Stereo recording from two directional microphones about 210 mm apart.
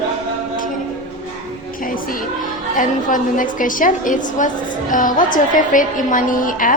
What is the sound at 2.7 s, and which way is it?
A woman's voice, 40° left (ahead or behind).